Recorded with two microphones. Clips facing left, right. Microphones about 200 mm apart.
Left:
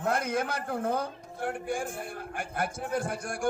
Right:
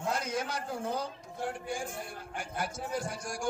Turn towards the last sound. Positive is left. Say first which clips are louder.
# left 5 dB
turn(degrees=55)  # may be behind; listen again after turning